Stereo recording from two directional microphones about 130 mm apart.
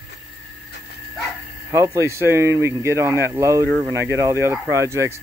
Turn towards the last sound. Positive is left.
turn(degrees=-20)  # may be behind; listen again after turning